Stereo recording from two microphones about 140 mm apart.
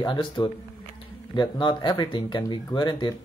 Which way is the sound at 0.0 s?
35° left (ahead or behind).